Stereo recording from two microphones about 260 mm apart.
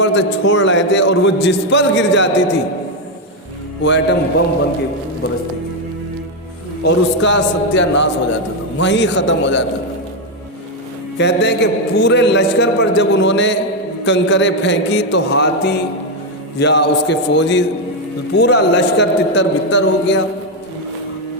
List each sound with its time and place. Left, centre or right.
0.0 s a man's voice: left
3.8 s a man's voice: left
6.8 s a man's voice: left
11.2 s a man's voice: left